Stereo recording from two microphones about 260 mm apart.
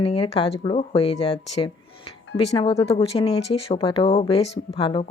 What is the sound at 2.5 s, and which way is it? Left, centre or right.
Speech, left.